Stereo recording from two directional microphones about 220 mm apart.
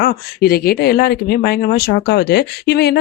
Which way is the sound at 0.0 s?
45° left (ahead or behind).